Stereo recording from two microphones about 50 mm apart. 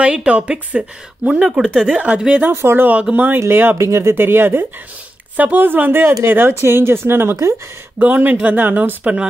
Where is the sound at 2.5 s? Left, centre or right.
Right.